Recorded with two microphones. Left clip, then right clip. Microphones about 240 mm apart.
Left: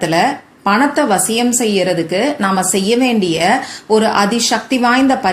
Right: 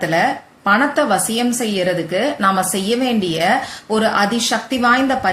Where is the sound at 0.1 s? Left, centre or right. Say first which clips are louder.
Left 2 dB; centre.